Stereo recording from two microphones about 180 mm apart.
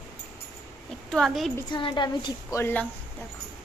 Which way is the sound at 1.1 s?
Centre (ahead or behind).